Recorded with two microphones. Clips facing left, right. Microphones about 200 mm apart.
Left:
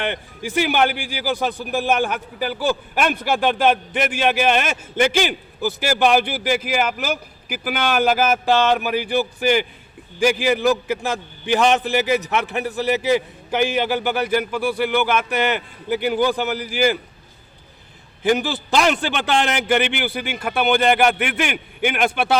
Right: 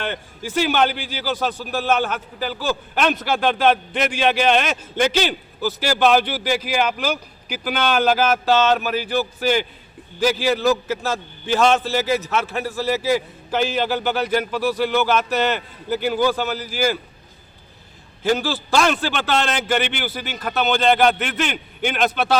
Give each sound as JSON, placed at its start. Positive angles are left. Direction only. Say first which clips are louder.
{"t": 0.0, "sound": "a man's voice", "louder": "left 2 dB", "side_deg": 15}
{"t": 18.2, "sound": "a man's voice", "louder": "left 1 dB", "side_deg": 15}